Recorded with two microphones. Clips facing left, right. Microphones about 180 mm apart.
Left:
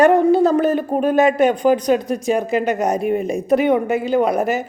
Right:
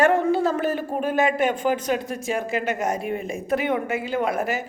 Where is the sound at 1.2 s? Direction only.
40° left (ahead or behind).